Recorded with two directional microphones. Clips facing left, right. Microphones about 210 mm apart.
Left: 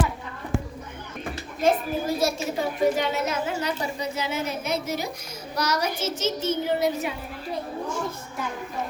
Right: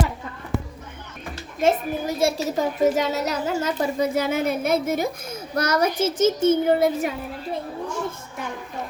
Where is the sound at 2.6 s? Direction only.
40° right (ahead or behind).